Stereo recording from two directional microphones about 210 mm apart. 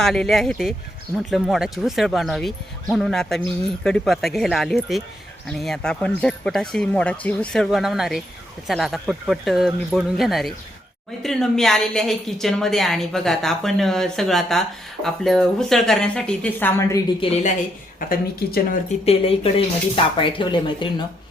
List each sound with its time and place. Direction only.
0.0 s a woman's voice: centre (ahead or behind)
17.2 s speech: 30° left (ahead or behind)
18.1 s speech: 45° left (ahead or behind)
19.0 s speech: 25° left (ahead or behind)